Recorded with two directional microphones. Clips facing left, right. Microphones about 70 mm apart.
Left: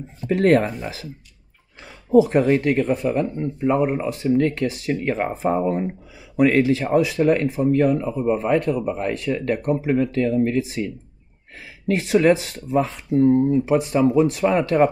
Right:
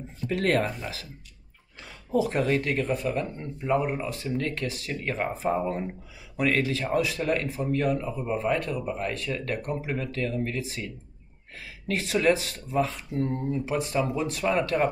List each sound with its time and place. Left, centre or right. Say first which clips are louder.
0.3 s speech: left 8 dB; left
2.1 s speech: left 9 dB; left